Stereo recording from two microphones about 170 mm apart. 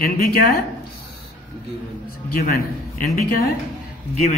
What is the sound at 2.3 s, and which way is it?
Speech, 60° left (ahead or behind).